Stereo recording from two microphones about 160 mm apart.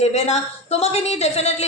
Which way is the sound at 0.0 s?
40° left (ahead or behind).